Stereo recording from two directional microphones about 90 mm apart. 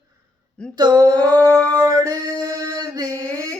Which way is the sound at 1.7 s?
45° right (ahead or behind).